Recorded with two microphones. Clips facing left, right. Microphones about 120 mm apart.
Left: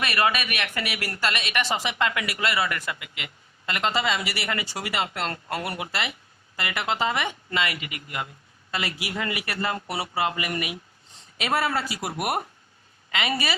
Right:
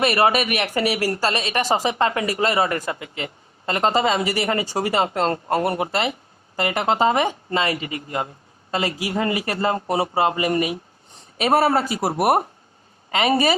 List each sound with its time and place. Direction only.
0.0 s a woman's voice: 30° right (ahead or behind)